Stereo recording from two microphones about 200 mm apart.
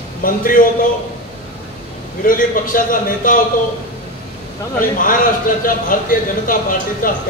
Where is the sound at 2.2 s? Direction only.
45° left (ahead or behind).